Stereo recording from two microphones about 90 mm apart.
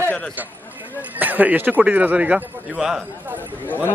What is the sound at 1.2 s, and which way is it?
A man's voice, 20° right (ahead or behind).